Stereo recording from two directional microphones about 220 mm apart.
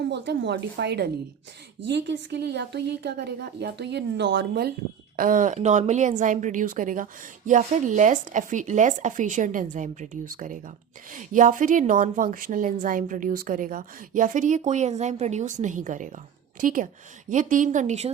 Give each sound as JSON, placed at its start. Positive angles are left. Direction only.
{"t": 0.1, "sound": "a woman's voice", "side_deg": -50}